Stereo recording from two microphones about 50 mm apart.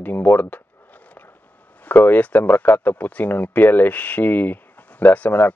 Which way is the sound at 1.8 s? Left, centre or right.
Left.